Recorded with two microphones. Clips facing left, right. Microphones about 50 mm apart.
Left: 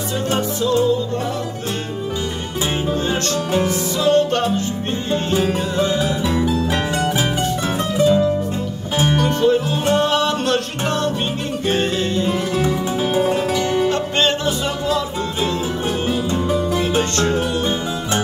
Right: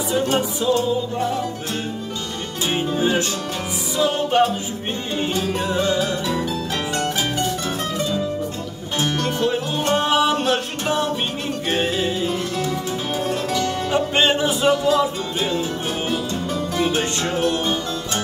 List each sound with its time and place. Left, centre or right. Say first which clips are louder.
0.1 s music: right 1 dB; centre
3.0 s music: even; centre
5.3 s music: left 3 dB; centre
8.9 s music: left 4 dB; centre
9.2 s music: left 5 dB; centre
13.2 s music: left 2 dB; centre
13.8 s music: even; centre
16.1 s music: left 4 dB; centre
16.8 s music: left 3 dB; centre